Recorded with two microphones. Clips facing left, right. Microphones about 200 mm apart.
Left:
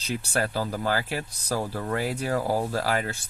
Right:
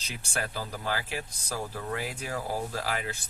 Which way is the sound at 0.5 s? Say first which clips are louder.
Left 7 dB; 65° left (ahead or behind).